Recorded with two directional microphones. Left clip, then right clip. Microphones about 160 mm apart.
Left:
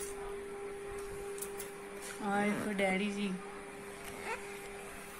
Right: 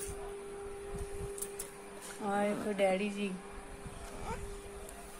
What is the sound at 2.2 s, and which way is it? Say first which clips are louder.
Speech: right 1 dB; 55° right (ahead or behind).